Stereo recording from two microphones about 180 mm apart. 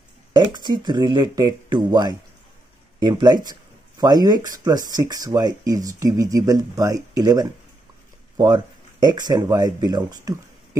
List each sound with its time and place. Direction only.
0.3 s speech: 25° right (ahead or behind)